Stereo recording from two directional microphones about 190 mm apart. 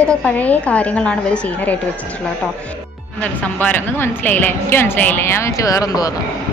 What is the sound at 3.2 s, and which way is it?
Speech, 10° left (ahead or behind).